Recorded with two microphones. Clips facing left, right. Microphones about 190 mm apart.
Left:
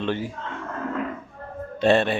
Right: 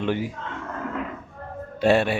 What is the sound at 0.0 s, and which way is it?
Speech, 15° right (ahead or behind).